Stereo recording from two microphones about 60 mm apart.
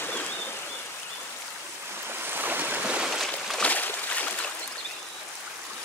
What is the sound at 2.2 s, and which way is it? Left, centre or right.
Boat, right.